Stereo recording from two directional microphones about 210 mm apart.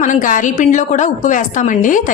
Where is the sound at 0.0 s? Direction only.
35° left (ahead or behind).